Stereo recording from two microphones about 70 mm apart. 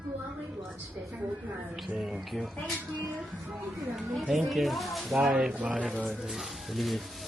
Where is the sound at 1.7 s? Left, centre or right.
Centre.